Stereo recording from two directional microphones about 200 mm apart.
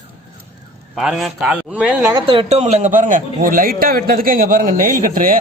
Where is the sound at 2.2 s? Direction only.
25° right (ahead or behind).